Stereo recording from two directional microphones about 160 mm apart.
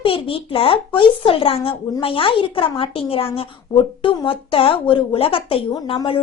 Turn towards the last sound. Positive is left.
turn(degrees=30)  # may be behind; listen again after turning